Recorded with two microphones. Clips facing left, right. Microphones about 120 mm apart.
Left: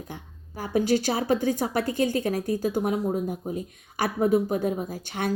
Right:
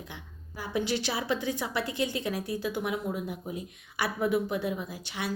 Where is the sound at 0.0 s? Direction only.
45° left (ahead or behind).